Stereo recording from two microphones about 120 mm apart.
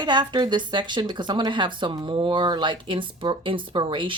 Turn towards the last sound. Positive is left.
turn(degrees=-45)  # may be behind; listen again after turning